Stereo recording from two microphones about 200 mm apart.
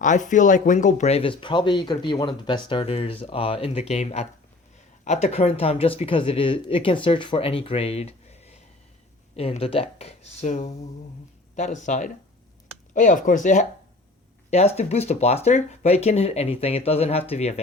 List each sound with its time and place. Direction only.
0.0 s speech: 40° left (ahead or behind)